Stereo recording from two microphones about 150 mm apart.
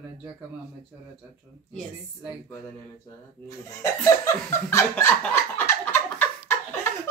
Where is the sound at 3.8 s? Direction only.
15° left (ahead or behind).